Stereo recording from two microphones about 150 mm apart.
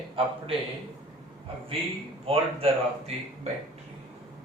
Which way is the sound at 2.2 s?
40° right (ahead or behind).